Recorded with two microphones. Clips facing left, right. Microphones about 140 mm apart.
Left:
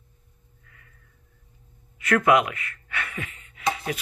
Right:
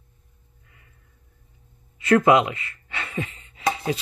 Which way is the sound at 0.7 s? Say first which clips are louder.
Left 1 dB; 20° right (ahead or behind).